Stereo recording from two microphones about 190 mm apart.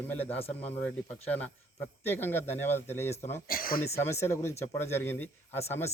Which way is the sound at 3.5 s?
50° left (ahead or behind).